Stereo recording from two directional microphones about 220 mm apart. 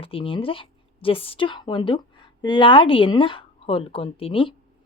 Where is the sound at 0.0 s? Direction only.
25° left (ahead or behind).